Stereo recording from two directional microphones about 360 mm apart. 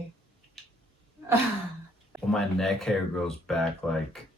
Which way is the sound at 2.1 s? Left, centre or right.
Centre.